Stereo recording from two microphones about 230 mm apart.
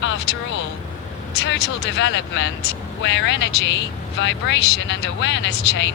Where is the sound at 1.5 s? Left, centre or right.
Left.